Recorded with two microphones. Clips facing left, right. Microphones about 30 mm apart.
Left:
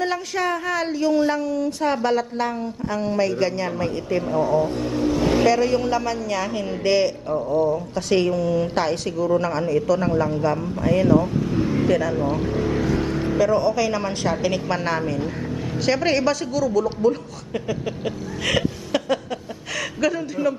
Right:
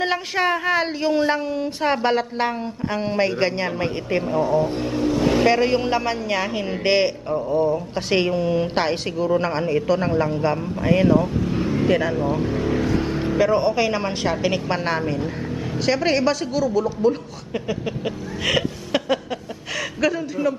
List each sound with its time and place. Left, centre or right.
0.0 s a woman's voice: right
4.2 s speech: centre
5.5 s a woman's voice: right
11.1 s vehicle: centre
11.9 s speech: right
12.5 s speech: centre
12.8 s vehicle: centre
13.4 s a man's voice: right
17.8 s a sound: centre